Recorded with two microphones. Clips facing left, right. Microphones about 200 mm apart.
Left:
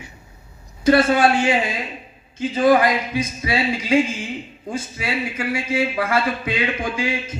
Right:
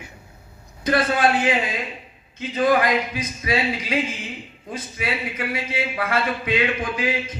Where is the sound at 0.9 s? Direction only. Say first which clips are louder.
Left 5 dB; 30° left (ahead or behind).